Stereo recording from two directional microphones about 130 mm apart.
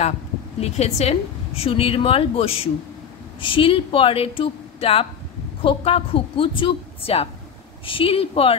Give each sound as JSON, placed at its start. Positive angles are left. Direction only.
{"t": 0.6, "sound": "a woman's voice", "side_deg": 55}